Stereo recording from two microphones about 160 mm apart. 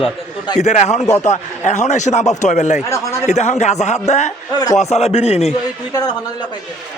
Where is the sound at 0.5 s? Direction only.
45° left (ahead or behind).